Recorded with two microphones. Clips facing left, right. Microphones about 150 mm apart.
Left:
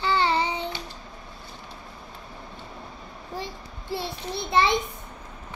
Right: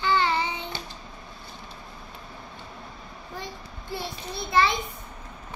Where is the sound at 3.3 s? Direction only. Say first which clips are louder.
Left 3 dB; 25° left (ahead or behind).